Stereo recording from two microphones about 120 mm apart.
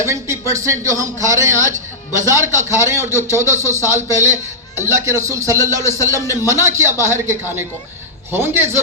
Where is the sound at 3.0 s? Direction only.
25° left (ahead or behind).